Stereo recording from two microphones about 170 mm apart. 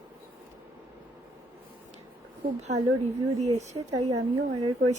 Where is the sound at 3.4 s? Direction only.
40° right (ahead or behind).